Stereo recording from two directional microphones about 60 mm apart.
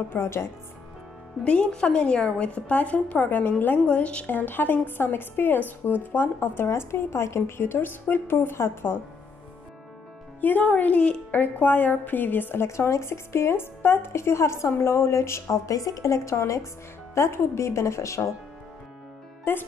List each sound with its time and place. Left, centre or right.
0.1 s speech: left
1.4 s a woman's voice: centre; by 9.0 s left
10.4 s a woman's voice: left
12.6 s speech: left
19.5 s speech: left